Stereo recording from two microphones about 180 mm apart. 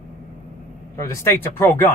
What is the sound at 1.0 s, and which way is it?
Speech, 15° left (ahead or behind).